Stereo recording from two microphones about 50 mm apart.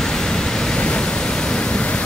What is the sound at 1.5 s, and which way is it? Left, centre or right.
Pink noise, left.